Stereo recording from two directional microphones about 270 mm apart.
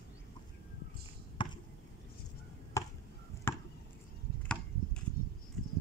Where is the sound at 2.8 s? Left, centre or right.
Centre.